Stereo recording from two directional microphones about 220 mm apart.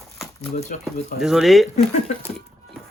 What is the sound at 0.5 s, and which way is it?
Speech, 35° left (ahead or behind).